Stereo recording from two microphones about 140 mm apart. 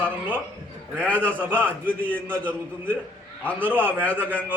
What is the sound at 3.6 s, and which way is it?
Speech, 15° right (ahead or behind).